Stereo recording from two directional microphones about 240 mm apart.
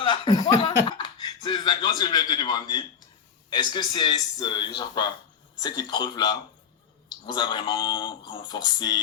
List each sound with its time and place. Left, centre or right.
0.0 s chuckle: centre
0.9 s a sound: centre
3.5 s speech: centre